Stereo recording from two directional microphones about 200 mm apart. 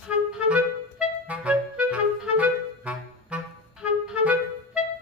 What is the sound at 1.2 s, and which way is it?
Clarinet, 5° right (ahead or behind).